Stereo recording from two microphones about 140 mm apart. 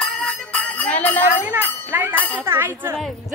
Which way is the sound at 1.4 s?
15° right (ahead or behind).